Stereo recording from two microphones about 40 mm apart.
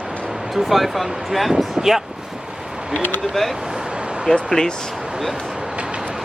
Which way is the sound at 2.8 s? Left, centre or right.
Right.